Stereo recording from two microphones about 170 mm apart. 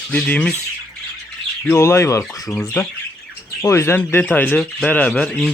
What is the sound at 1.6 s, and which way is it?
Speech, 15° left (ahead or behind).